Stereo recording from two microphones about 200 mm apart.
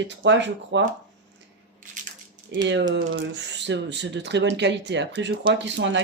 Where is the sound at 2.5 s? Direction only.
60° right (ahead or behind).